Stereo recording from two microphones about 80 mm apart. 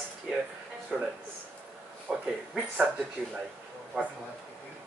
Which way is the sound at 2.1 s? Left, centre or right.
Centre.